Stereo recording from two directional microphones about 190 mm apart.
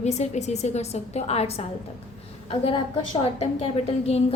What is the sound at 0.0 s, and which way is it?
A woman's voice, 35° left (ahead or behind).